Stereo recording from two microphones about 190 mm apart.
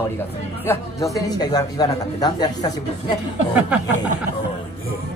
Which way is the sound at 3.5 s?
10° right (ahead or behind).